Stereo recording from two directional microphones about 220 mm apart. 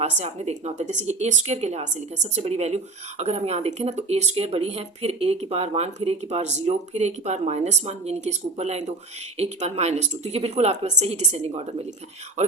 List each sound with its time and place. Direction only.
0.0 s a woman's voice: 30° right (ahead or behind)